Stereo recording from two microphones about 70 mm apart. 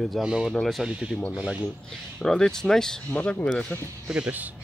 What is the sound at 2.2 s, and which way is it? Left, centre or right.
Speech, centre.